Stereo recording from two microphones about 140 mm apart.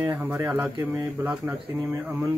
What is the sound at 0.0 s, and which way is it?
Speech, 15° right (ahead or behind).